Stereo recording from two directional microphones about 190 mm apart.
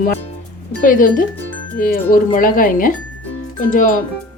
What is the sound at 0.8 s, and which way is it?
Speech, 45° left (ahead or behind).